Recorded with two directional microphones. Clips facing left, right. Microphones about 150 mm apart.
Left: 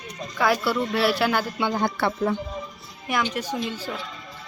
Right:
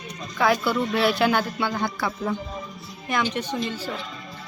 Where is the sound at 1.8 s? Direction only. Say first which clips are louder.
Left 3 dB; 55° left (ahead or behind).